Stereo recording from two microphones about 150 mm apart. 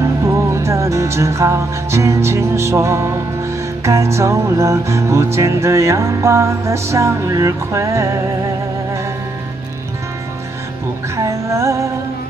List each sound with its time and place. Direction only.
0.0 s music: 20° right (ahead or behind)
11.1 s music: 20° right (ahead or behind)